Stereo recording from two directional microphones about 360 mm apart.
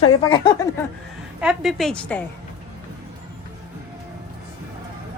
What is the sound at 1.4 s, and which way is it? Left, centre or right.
Speech, centre.